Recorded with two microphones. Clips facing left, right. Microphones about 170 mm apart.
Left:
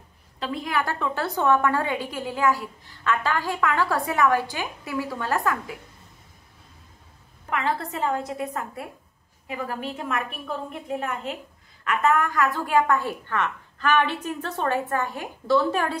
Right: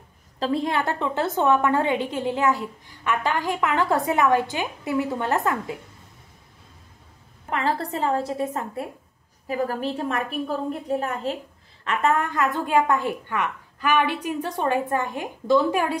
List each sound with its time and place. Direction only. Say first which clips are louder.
0.4 s a woman's voice: right 4 dB; 35° right (ahead or behind)
7.4 s a woman's voice: right 2 dB; 35° right (ahead or behind); by 16.0 s 10° right (ahead or behind)